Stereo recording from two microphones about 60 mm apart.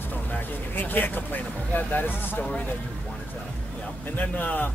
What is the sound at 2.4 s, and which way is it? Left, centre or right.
Speech, left.